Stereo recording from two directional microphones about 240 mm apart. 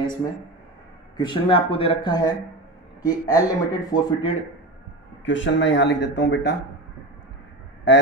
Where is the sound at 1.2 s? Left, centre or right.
Left.